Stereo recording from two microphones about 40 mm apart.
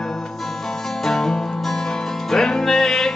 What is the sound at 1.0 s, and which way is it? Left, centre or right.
Music, centre.